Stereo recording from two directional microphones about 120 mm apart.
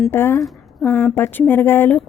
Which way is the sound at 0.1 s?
20° left (ahead or behind).